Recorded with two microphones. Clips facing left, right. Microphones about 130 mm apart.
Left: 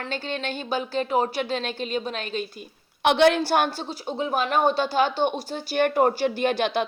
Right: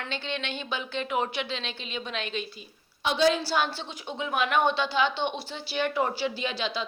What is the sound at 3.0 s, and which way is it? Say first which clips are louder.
A woman's voice: left 6 dB; 65° left (ahead or behind).